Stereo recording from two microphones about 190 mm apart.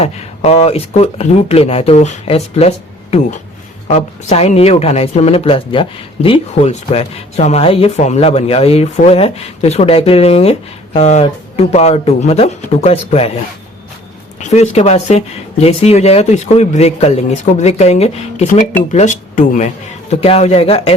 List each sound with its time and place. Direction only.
0.0 s speech: 30° left (ahead or behind)
14.3 s speech: 35° left (ahead or behind)